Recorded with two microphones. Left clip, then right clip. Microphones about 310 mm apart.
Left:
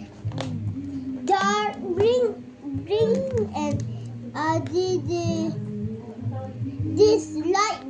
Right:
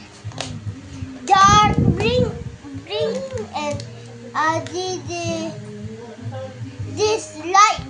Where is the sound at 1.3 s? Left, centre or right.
Centre.